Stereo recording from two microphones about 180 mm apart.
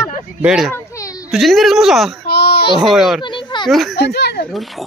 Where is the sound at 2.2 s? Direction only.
60° left (ahead or behind).